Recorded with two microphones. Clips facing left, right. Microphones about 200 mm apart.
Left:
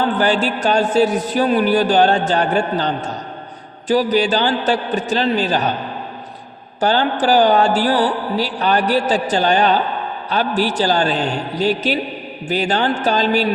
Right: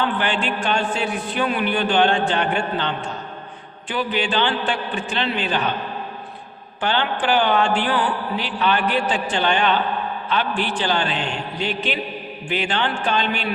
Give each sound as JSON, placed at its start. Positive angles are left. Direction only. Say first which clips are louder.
{"t": 0.0, "sound": "mantra", "louder": "left 6 dB", "side_deg": 40}
{"t": 6.7, "sound": "mantra", "louder": "left 6 dB", "side_deg": 40}